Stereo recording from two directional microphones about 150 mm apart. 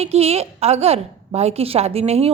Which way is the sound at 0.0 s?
45° right (ahead or behind).